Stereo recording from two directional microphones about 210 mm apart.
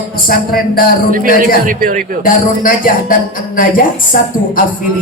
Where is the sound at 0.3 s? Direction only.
45° left (ahead or behind).